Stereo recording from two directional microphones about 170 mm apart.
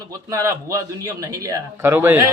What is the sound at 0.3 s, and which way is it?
A man's voice, 20° right (ahead or behind).